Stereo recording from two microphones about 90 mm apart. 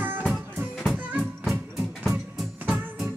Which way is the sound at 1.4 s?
Centre (ahead or behind).